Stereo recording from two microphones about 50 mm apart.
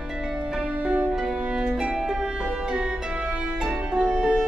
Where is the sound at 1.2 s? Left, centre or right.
Centre.